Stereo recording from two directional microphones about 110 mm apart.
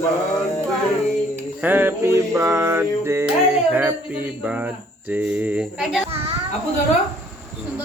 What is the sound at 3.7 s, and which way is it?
Cricket, 15° right (ahead or behind).